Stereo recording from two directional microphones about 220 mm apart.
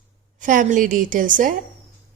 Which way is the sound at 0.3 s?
35° right (ahead or behind).